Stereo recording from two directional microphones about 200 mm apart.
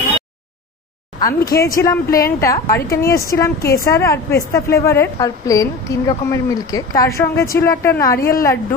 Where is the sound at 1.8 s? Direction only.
15° left (ahead or behind).